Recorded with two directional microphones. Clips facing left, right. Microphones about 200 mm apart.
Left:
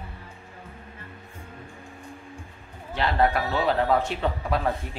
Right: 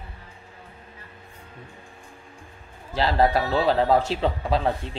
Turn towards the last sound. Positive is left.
turn(degrees=-30)  # may be behind; listen again after turning